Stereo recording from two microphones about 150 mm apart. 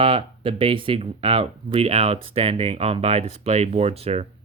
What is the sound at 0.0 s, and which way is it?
Speech, 35° right (ahead or behind).